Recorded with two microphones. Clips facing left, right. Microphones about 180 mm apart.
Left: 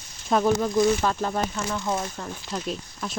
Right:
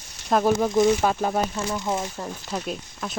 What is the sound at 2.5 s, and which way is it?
Speech, centre (ahead or behind).